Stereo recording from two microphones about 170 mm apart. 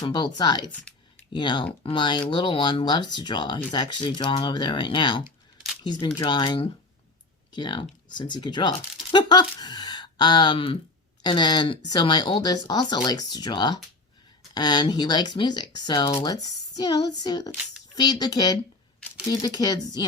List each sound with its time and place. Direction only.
0.0 s speech: 25° left (ahead or behind)